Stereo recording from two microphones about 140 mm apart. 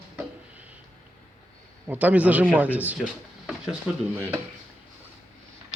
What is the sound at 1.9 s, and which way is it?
A man's voice, 10° right (ahead or behind).